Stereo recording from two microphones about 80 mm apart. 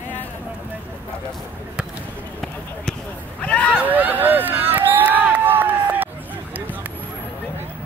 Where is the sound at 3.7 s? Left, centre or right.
Right.